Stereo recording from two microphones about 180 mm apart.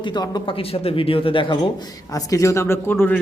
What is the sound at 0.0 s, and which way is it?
A man's voice, 25° left (ahead or behind).